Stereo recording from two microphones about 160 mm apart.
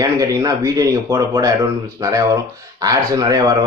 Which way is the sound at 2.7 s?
25° right (ahead or behind).